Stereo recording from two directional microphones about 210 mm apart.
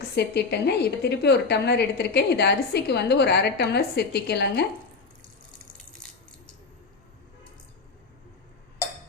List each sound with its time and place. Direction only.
0.2 s a woman's voice: 50° left (ahead or behind)